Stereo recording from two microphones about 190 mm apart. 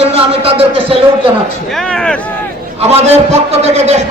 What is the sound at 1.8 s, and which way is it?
Speech, 5° left (ahead or behind).